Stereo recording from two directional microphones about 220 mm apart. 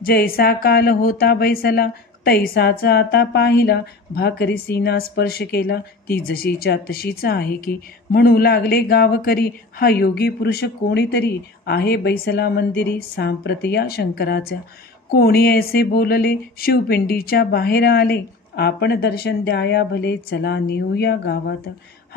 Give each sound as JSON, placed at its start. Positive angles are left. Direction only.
{"t": 0.0, "sound": "speech", "side_deg": 45}